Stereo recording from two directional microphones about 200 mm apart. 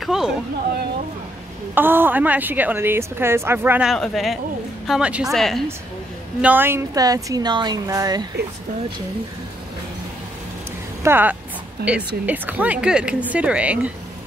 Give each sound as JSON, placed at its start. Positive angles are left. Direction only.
{"t": 0.0, "sound": "a sound", "side_deg": 0}
{"t": 1.8, "sound": "a woman's voice", "side_deg": -10}
{"t": 6.4, "sound": "a woman's voice", "side_deg": -10}
{"t": 11.0, "sound": "speech", "side_deg": -10}
{"t": 11.8, "sound": "a woman's voice", "side_deg": -55}
{"t": 12.3, "sound": "a woman's voice", "side_deg": -5}